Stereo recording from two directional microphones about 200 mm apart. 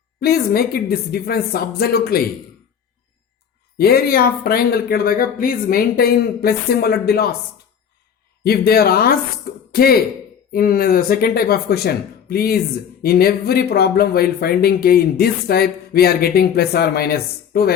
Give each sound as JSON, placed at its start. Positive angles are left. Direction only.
{"t": 0.2, "sound": "speech", "side_deg": 50}
{"t": 3.8, "sound": "speech", "side_deg": 50}
{"t": 8.4, "sound": "speech", "side_deg": 50}